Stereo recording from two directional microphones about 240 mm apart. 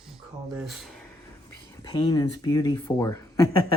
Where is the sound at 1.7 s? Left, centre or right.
Centre.